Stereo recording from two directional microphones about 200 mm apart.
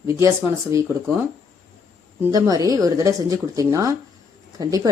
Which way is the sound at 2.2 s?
15° right (ahead or behind).